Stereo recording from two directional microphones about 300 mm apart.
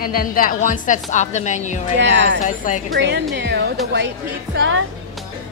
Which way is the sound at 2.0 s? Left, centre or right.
Right.